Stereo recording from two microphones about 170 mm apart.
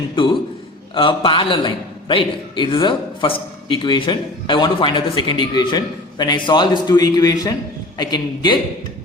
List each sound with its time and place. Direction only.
0.9 s a man's voice: 30° left (ahead or behind)